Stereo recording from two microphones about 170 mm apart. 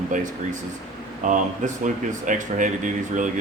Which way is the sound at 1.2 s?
50° right (ahead or behind).